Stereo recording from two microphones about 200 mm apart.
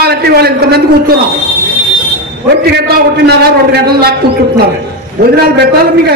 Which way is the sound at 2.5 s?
55° right (ahead or behind).